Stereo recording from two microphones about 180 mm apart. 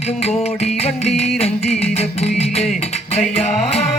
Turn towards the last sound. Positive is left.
turn(degrees=35)  # may be behind; listen again after turning